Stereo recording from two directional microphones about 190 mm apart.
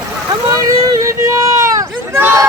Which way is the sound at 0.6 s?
15° right (ahead or behind).